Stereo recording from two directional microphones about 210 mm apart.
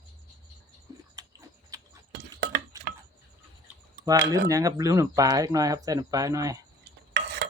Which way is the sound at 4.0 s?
15° right (ahead or behind).